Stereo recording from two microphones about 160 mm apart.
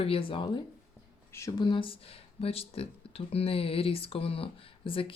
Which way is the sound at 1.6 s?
30° left (ahead or behind).